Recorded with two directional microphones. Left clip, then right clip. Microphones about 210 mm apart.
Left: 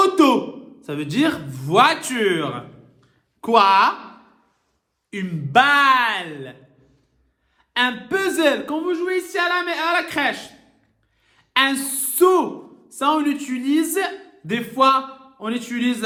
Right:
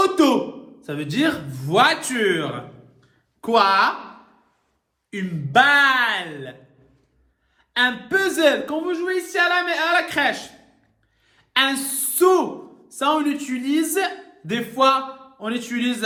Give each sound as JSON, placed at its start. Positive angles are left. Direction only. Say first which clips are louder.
{"t": 0.0, "sound": "a sound", "louder": "left 2 dB", "side_deg": 30}
{"t": 0.8, "sound": "speech", "louder": "left 1 dB", "side_deg": 30}
{"t": 5.1, "sound": "speech", "louder": "left 1 dB", "side_deg": 30}
{"t": 7.7, "sound": "a woman's voice", "louder": "right 1 dB", "side_deg": 30}